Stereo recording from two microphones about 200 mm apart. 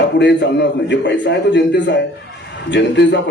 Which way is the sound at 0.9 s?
65° left (ahead or behind).